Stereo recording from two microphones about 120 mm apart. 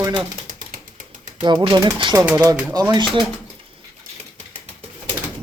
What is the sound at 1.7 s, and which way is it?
A man's voice, 35° right (ahead or behind).